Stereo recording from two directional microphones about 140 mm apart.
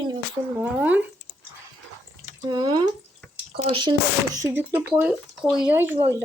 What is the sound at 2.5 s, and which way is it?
Speech, 30° right (ahead or behind).